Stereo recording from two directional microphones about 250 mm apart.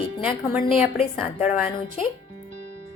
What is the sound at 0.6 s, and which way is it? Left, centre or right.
Speech, left.